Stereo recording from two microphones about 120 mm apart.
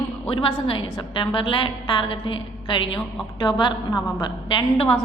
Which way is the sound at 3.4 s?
35° left (ahead or behind).